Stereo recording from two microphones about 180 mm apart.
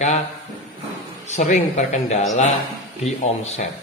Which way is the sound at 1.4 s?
40° left (ahead or behind).